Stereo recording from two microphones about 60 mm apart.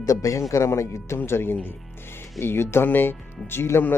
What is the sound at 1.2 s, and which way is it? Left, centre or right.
Speech, left.